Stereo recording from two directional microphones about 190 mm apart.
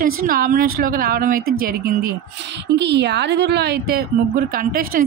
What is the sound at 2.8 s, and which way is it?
A woman's voice, 65° right (ahead or behind).